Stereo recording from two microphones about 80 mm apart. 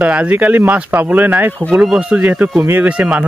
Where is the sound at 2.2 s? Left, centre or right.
Centre.